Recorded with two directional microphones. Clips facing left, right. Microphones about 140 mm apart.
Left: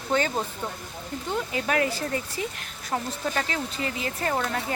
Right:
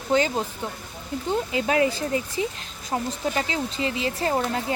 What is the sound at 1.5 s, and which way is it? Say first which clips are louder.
Speech: right 4 dB; 20° right (ahead or behind).